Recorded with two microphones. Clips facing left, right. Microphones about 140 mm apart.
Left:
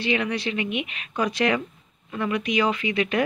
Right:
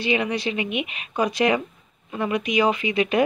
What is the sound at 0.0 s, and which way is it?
Speech, 15° right (ahead or behind).